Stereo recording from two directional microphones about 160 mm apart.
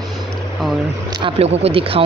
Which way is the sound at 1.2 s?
40° right (ahead or behind).